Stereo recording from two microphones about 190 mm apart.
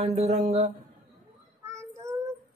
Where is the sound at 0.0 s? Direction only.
35° right (ahead or behind).